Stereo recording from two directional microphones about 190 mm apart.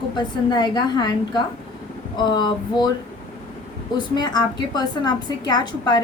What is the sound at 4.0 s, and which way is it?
A woman's voice, 20° left (ahead or behind).